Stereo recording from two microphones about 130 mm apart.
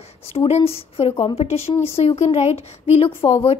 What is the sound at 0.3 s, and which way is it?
Speech, 50° left (ahead or behind).